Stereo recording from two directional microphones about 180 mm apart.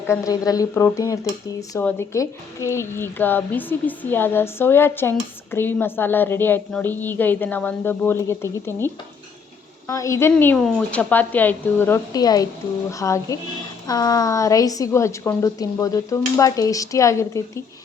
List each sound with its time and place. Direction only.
0.1 s a woman's voice: 20° left (ahead or behind)